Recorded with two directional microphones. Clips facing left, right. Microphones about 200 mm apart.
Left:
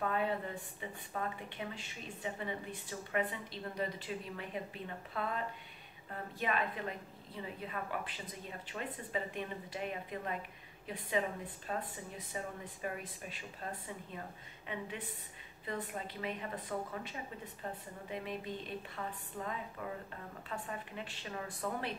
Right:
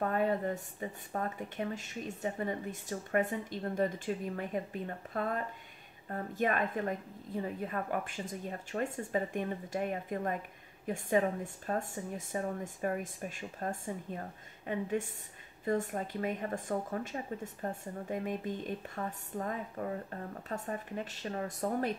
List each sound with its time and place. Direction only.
0.0 s a woman's voice: 45° right (ahead or behind)